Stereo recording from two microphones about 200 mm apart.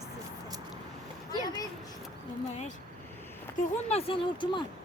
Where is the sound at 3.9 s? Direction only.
30° left (ahead or behind).